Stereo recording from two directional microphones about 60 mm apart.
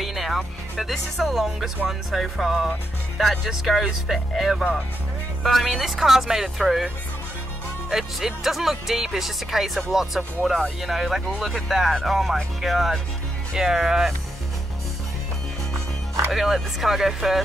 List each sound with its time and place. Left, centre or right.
0.0 s speech: centre
7.9 s speech: centre
16.3 s speech: centre